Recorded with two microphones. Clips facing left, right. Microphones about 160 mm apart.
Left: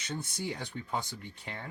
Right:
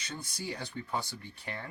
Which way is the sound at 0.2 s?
20° left (ahead or behind).